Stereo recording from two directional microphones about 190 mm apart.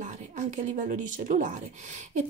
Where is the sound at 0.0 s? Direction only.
40° right (ahead or behind).